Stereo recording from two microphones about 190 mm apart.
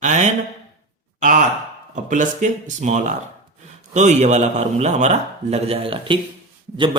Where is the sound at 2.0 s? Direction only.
40° right (ahead or behind).